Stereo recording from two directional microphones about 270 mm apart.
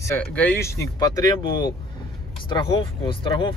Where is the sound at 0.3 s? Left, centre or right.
Centre.